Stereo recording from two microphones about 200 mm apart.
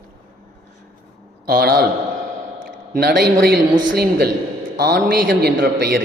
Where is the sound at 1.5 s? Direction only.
50° right (ahead or behind).